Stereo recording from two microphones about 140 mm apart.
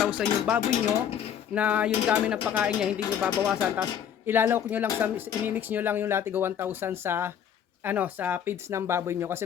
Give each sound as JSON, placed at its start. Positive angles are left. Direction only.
{"t": 0.1, "sound": "speech", "side_deg": -10}